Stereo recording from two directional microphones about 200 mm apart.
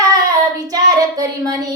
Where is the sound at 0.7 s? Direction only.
20° right (ahead or behind).